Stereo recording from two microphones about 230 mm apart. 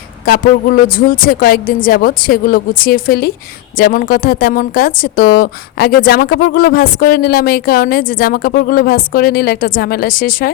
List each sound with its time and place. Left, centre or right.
0.3 s speech: left